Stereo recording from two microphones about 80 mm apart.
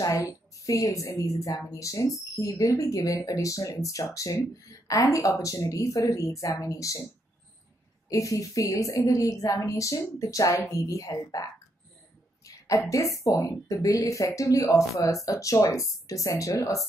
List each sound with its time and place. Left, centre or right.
0.2 s speech: left
8.1 s speech: left
12.4 s speech: left